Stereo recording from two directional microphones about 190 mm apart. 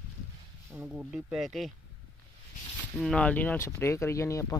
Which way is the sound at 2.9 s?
5° left (ahead or behind).